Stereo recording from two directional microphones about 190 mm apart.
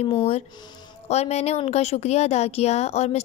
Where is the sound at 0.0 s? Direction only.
30° left (ahead or behind).